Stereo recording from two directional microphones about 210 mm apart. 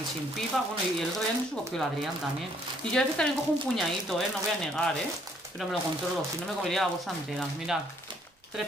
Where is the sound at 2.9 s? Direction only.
5° left (ahead or behind).